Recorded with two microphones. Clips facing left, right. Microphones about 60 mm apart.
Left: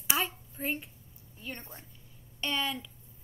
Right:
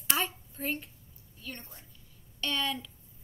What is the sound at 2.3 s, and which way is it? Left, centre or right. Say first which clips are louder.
Speech: even; centre.